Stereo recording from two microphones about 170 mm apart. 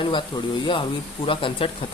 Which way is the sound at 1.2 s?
30° left (ahead or behind).